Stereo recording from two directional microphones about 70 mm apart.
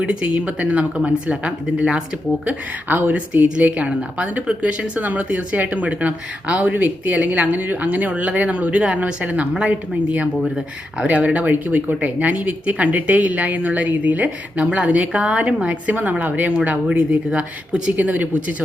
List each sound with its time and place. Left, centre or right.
0.0 s speech: centre
11.0 s speech: right